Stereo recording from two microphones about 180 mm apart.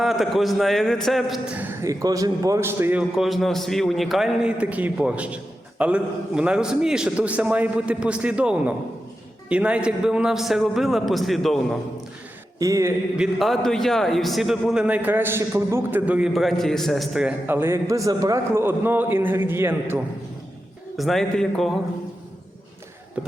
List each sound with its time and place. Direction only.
0.0 s a man's voice: centre (ahead or behind)
3.2 s a man's voice: centre (ahead or behind)
12.5 s speech: 20° right (ahead or behind)
13.1 s a man's voice: centre (ahead or behind)
20.9 s a man's voice: centre (ahead or behind)
23.2 s a man's voice: 5° right (ahead or behind)